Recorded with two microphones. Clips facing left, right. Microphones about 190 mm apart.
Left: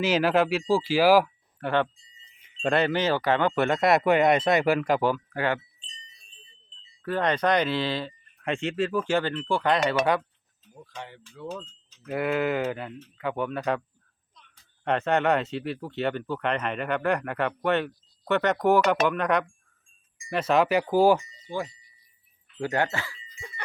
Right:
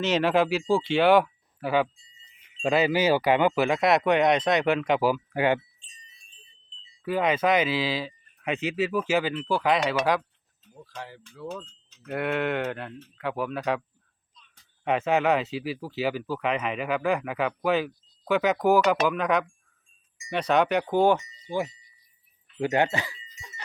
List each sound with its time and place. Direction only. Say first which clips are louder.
0.0 s speech: even; 5° left (ahead or behind); by 5.5 s 15° right (ahead or behind)
7.0 s speech: right 1 dB; 5° right (ahead or behind)
10.8 s speech: right 1 dB; centre (ahead or behind)
14.8 s speech: even; 5° right (ahead or behind)
21.5 s speech: right 3 dB; 10° right (ahead or behind)